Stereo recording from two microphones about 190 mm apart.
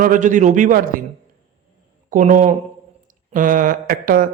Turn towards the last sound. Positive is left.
turn(degrees=-45)  # may be behind; listen again after turning